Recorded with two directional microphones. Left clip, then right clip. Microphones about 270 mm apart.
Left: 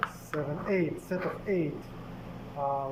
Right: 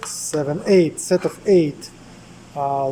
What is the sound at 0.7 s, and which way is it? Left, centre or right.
Speech, right.